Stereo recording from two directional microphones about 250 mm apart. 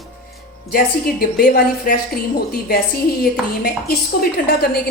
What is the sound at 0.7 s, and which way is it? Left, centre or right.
A woman's voice, left.